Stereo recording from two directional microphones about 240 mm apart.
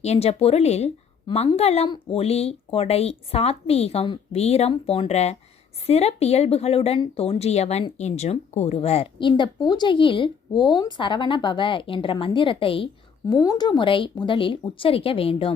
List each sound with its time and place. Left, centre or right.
0.0 s speech: left